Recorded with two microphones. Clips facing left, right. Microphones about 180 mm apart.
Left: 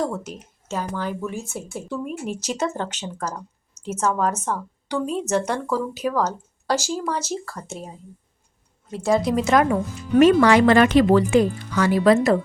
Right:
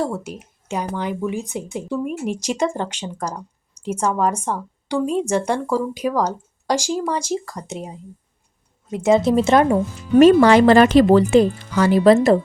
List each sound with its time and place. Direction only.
0.0 s a woman's voice: 10° right (ahead or behind); by 12.4 s 30° right (ahead or behind)